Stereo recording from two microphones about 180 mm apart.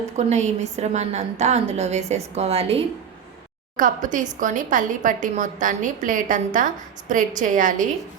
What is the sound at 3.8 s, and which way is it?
A woman's voice, 45° right (ahead or behind).